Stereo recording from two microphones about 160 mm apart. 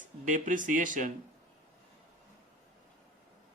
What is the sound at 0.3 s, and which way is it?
Speech, 50° right (ahead or behind).